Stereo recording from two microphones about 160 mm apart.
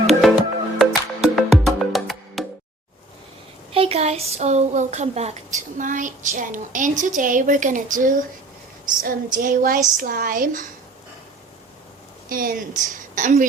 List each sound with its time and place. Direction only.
0.1 s music: centre (ahead or behind)
3.7 s a woman's voice: 35° right (ahead or behind); by 10.7 s 55° right (ahead or behind)
12.3 s a woman's voice: 60° right (ahead or behind)